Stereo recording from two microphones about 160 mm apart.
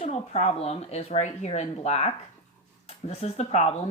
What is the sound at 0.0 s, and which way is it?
Speech, 45° left (ahead or behind).